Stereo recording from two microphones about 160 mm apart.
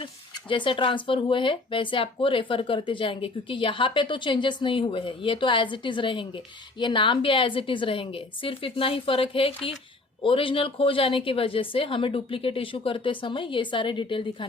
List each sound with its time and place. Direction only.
0.0 s speech: 30° left (ahead or behind)